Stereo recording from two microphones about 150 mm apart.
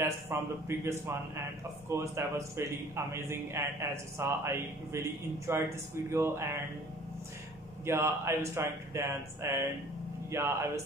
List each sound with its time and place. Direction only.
0.0 s a man's voice: 20° right (ahead or behind)
7.8 s a man's voice: 15° right (ahead or behind)